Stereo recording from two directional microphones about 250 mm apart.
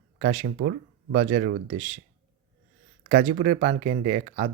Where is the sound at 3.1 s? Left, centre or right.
Right.